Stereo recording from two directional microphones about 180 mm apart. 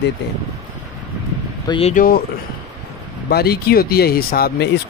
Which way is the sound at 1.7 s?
35° left (ahead or behind).